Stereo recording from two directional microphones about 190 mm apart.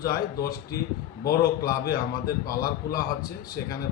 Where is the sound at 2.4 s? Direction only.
20° left (ahead or behind).